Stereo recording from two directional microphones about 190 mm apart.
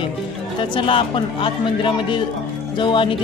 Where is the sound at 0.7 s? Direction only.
25° left (ahead or behind).